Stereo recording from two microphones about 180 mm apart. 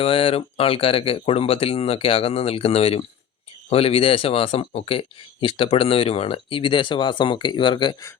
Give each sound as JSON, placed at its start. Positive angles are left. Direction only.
{"t": 0.0, "sound": "speech", "side_deg": 30}